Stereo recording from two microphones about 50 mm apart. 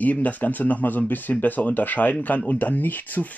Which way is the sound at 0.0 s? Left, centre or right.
Left.